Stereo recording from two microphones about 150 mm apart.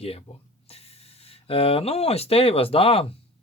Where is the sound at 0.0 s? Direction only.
40° left (ahead or behind).